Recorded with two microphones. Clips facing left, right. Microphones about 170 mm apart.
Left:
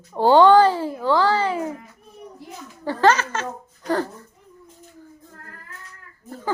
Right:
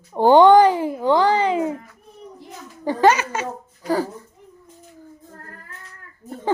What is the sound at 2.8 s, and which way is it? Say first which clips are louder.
A child's voice: right 2 dB; 15° right (ahead or behind).